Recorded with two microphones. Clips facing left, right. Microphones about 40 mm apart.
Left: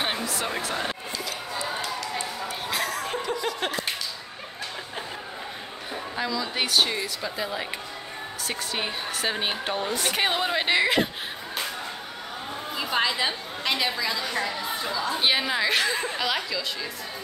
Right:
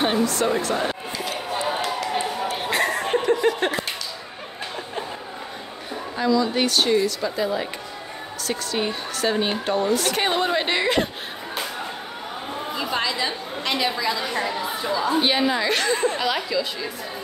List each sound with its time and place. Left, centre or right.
0.0 s speech: centre
1.5 s run: right
2.7 s chuckle: right
6.1 s a woman's voice: centre; by 10.1 s left
10.1 s a woman's voice: centre
12.7 s chatter: centre
13.0 s speech: centre
13.7 s a woman's voice: centre